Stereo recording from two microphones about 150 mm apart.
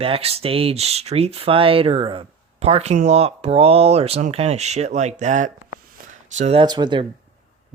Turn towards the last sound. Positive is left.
turn(degrees=-30)  # may be behind; listen again after turning